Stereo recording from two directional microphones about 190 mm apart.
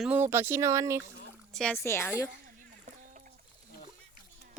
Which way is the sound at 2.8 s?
40° right (ahead or behind).